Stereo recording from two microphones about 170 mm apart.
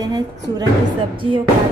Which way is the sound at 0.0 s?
25° right (ahead or behind).